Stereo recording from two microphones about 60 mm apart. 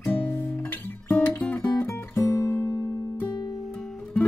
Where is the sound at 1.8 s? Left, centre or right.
Left.